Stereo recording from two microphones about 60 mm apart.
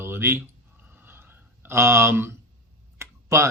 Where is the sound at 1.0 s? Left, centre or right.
Right.